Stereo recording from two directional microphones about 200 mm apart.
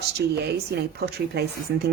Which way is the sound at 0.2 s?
55° right (ahead or behind).